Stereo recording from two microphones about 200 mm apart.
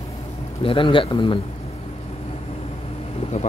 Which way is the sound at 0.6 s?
25° left (ahead or behind).